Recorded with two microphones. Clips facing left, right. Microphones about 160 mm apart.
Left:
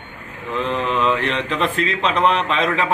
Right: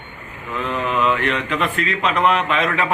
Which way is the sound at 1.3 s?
30° left (ahead or behind).